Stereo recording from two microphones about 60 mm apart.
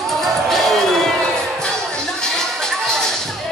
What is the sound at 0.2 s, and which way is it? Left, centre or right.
Music, centre.